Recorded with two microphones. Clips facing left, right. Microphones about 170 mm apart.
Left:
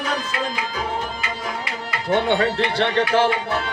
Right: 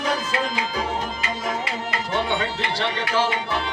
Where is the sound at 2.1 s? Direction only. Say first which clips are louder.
Left 7 dB; 60° left (ahead or behind).